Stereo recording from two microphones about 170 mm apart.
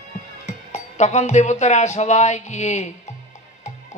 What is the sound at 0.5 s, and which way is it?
Music, 45° left (ahead or behind).